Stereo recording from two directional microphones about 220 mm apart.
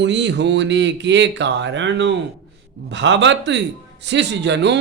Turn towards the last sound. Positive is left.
turn(degrees=-50)  # may be behind; listen again after turning